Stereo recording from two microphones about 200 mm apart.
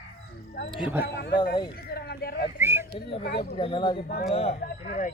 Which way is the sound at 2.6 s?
10° right (ahead or behind).